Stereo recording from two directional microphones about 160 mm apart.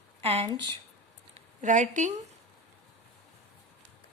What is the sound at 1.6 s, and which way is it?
Speech, 50° right (ahead or behind).